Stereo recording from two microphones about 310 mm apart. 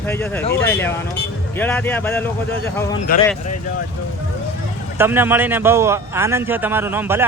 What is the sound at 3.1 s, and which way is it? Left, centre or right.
Speech, left.